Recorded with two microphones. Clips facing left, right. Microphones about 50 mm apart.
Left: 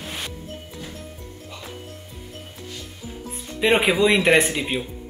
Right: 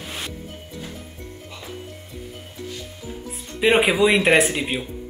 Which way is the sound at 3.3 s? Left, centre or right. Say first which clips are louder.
Right 1 dB; centre.